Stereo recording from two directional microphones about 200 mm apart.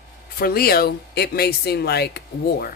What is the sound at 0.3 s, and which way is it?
Speech, 50° left (ahead or behind).